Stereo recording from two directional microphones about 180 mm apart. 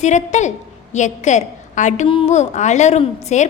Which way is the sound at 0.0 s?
40° left (ahead or behind).